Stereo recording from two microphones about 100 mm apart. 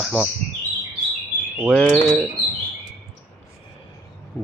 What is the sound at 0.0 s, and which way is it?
Speech, centre (ahead or behind).